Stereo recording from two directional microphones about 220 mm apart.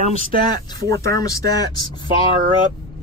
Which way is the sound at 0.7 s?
15° left (ahead or behind).